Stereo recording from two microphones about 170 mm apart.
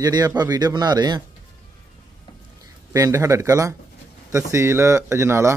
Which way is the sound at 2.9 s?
20° right (ahead or behind).